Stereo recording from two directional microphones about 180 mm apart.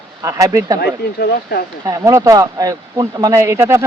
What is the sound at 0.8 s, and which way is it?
Speech, 60° left (ahead or behind).